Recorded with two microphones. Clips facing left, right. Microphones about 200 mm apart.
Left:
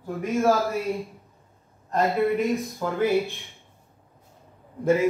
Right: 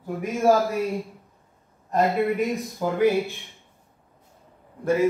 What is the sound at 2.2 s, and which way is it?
Speech, centre (ahead or behind).